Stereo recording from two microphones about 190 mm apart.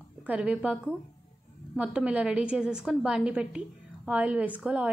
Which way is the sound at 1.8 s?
5° right (ahead or behind).